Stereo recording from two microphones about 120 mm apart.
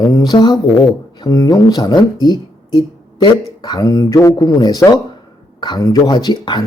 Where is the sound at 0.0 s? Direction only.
35° left (ahead or behind).